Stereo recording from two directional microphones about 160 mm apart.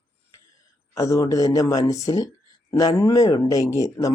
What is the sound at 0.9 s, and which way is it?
Speech, 20° left (ahead or behind).